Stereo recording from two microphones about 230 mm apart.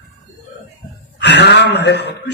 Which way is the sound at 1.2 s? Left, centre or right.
Left.